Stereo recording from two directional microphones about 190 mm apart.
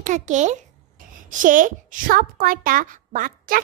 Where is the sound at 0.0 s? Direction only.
40° right (ahead or behind).